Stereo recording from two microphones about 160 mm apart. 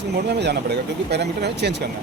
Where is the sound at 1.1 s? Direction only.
90° right.